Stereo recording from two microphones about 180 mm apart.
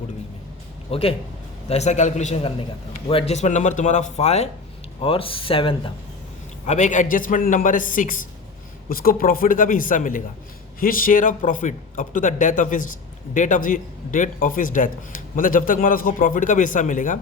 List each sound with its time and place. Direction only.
0.9 s a man's voice: 30° left (ahead or behind)
6.7 s a man's voice: 40° left (ahead or behind)